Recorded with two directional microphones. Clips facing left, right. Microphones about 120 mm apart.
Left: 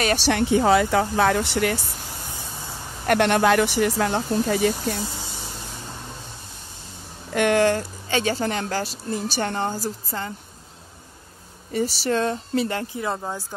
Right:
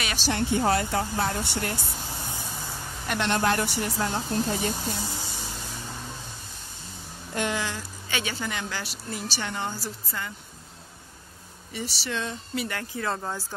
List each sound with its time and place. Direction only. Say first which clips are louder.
0.1 s speech: left 7 dB; 70° left (ahead or behind); by 1.8 s 90° left
3.1 s speech: left 7 dB; 65° left (ahead or behind); by 4.7 s 90° left
7.3 s speech: left 11 dB; 65° left (ahead or behind)
8.1 s a woman's voice: left 8 dB; 40° left (ahead or behind)
11.7 s speech: left 10 dB; 45° left (ahead or behind)
12.6 s speech: left 4 dB; 25° left (ahead or behind)